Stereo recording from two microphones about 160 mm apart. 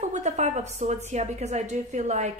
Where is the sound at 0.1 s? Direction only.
45° right (ahead or behind).